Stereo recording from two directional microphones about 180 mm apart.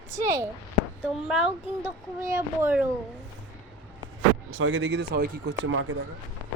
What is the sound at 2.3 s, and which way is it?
Speech, 15° right (ahead or behind).